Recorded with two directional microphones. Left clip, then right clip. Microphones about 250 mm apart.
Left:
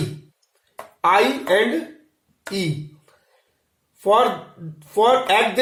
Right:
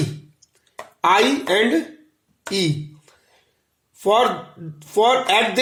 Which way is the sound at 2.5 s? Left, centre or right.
Right.